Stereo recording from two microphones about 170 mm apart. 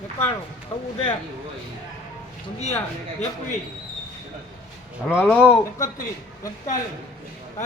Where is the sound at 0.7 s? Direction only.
15° left (ahead or behind).